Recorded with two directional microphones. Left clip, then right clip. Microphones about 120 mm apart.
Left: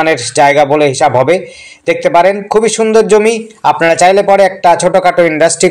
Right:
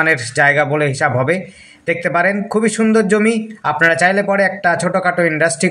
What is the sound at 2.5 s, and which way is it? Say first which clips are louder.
A man's voice: left 8 dB; 15° left (ahead or behind).